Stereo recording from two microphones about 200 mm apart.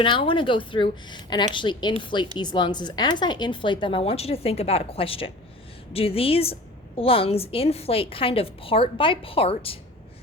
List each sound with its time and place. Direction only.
0.0 s a woman's voice: 25° left (ahead or behind)